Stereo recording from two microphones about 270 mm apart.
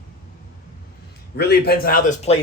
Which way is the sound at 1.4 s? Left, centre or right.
Left.